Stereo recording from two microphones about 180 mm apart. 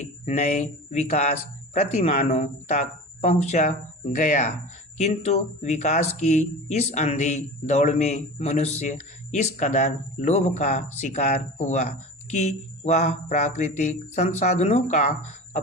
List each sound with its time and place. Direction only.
0.0 s speech: 40° left (ahead or behind)